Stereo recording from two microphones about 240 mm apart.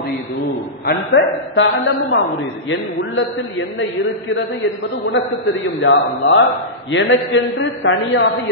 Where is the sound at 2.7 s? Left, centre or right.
Left.